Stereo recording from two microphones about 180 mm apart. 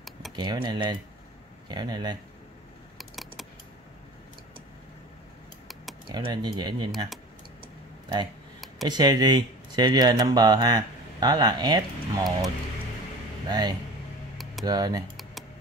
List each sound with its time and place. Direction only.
0.4 s speech: 25° right (ahead or behind)
3.0 s computer keyboard: centre (ahead or behind)
6.0 s speech: 25° right (ahead or behind)
8.8 s speech: 20° right (ahead or behind)
13.5 s speech: 20° right (ahead or behind)
14.4 s a sound: centre (ahead or behind)
14.7 s speech: 20° right (ahead or behind)